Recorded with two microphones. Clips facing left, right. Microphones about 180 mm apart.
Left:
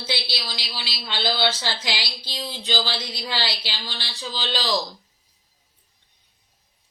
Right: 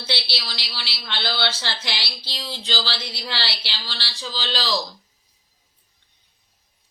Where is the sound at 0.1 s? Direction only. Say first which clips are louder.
Even; 15° left (ahead or behind).